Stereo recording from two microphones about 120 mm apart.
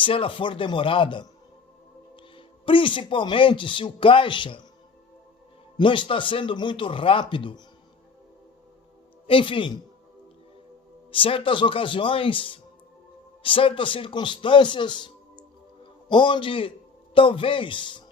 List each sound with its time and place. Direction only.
0.0 s a man's voice: 45° left (ahead or behind)
5.7 s a man's voice: 45° left (ahead or behind)
9.2 s a man's voice: 45° left (ahead or behind)
11.1 s a man's voice: 45° left (ahead or behind)